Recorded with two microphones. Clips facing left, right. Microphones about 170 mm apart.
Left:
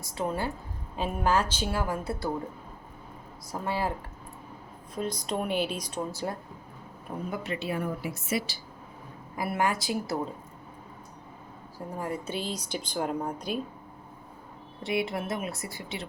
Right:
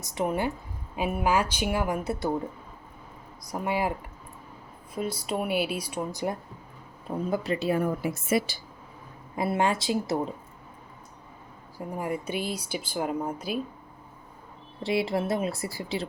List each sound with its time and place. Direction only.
0.0 s speech: 20° right (ahead or behind)
3.5 s speech: 15° right (ahead or behind)
4.9 s speech: 10° right (ahead or behind)
7.3 s a woman's voice: 35° right (ahead or behind); by 8.5 s 50° right (ahead or behind)
9.3 s speech: 25° right (ahead or behind)
11.9 s speech: 10° right (ahead or behind)
14.8 s speech: 30° right (ahead or behind)